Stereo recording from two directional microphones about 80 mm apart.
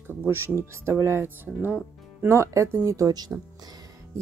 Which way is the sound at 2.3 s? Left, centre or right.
Right.